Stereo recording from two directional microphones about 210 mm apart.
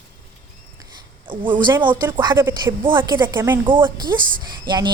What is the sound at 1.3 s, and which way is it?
A woman's voice, 25° right (ahead or behind).